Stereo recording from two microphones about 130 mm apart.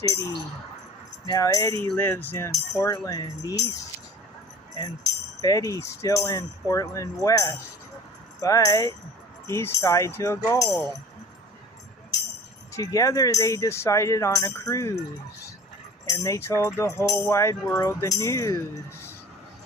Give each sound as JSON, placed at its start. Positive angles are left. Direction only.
{"t": 0.1, "sound": "speech", "side_deg": 25}
{"t": 5.4, "sound": "speech", "side_deg": 25}
{"t": 12.7, "sound": "speech", "side_deg": 25}
{"t": 16.0, "sound": "speech", "side_deg": 25}